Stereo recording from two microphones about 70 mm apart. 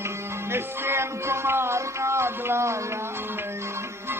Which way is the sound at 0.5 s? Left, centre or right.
Right.